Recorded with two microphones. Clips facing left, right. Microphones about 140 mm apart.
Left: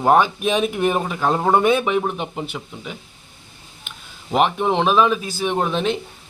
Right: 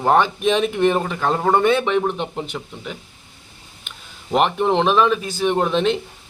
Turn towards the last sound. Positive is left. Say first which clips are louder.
# right 3 dB
turn(degrees=0)  # may be behind; listen again after turning